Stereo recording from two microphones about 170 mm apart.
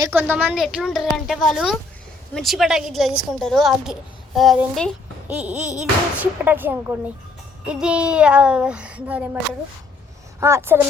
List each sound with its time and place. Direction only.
0.1 s a child's voice: 10° right (ahead or behind)
10.4 s speech: 15° right (ahead or behind)